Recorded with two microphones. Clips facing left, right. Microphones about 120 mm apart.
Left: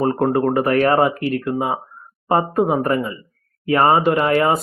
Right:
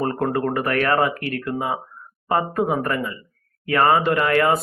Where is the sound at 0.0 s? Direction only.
20° left (ahead or behind).